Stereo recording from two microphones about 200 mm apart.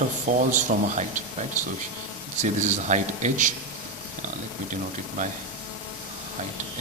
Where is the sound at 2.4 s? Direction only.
35° right (ahead or behind).